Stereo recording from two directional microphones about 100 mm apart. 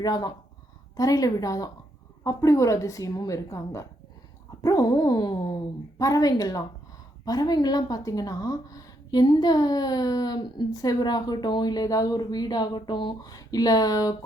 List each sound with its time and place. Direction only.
0.0 s a woman's voice: 40° left (ahead or behind)
13.2 s a woman's voice: 40° left (ahead or behind)